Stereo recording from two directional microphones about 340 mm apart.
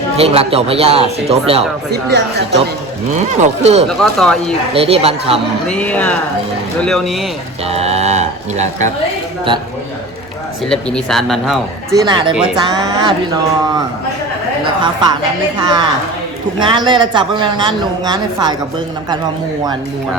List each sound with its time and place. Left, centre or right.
0.2 s a woman's voice: centre
1.9 s speech: right
3.1 s speech: centre
3.8 s speech: centre
4.7 s a woman's voice: centre
5.6 s speech: centre
7.7 s speech: centre
10.7 s speech: centre
11.9 s a woman's voice: centre
15.6 s a woman's voice: centre